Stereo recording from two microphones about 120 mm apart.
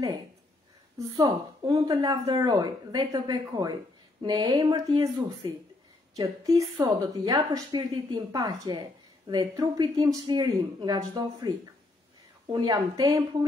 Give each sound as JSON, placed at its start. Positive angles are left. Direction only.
{"t": 0.9, "sound": "a woman's voice", "side_deg": -30}